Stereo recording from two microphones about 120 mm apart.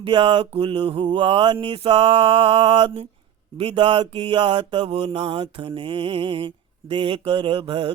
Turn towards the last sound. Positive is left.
turn(degrees=-50)  # may be behind; listen again after turning